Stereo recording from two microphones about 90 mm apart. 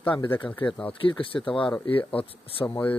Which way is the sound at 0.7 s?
10° left (ahead or behind).